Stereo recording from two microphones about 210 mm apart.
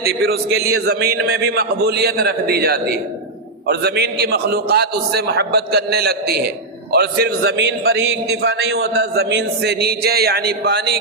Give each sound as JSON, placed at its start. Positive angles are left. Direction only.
{"t": 0.0, "sound": "a man's voice", "side_deg": -45}